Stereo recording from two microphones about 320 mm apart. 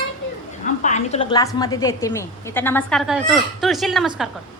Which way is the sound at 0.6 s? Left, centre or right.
Left.